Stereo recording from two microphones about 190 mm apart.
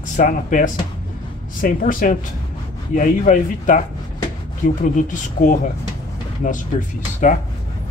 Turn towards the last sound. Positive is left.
turn(degrees=40)  # may be behind; listen again after turning